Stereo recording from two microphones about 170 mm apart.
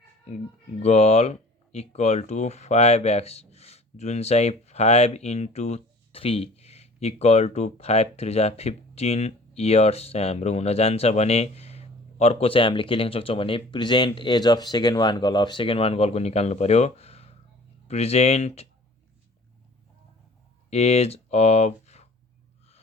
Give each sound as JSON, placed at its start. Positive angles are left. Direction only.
{"t": 0.8, "sound": "speech", "side_deg": 40}
{"t": 20.7, "sound": "speech", "side_deg": 35}